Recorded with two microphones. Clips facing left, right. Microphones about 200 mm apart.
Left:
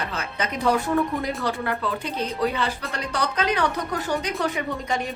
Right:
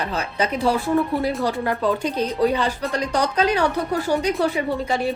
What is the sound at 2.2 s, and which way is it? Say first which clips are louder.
Speech: right 4 dB; 35° right (ahead or behind).